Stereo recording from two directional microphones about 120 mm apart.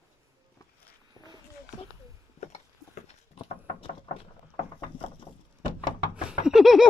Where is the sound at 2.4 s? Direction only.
70° left (ahead or behind).